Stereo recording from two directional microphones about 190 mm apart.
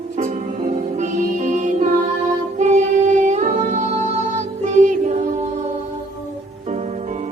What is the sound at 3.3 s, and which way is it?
Music, 40° right (ahead or behind).